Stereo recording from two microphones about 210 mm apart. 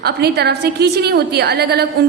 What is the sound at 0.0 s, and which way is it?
A woman's voice, 50° right (ahead or behind).